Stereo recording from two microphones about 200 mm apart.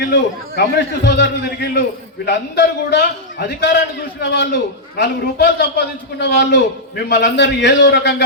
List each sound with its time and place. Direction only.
0.0 s a man's voice: 60° left (ahead or behind)